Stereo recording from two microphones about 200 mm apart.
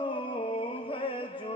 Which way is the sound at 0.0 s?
25° left (ahead or behind).